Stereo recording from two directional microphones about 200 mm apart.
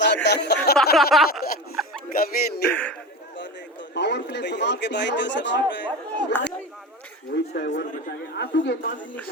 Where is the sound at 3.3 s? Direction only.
60° left (ahead or behind).